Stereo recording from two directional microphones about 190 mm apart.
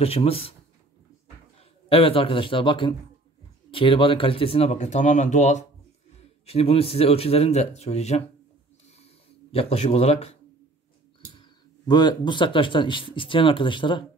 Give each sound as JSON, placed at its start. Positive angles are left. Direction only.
{"t": 0.0, "sound": "speech", "side_deg": 30}
{"t": 1.6, "sound": "a man's voice", "side_deg": 30}
{"t": 9.5, "sound": "speech", "side_deg": 30}
{"t": 11.9, "sound": "speech", "side_deg": 20}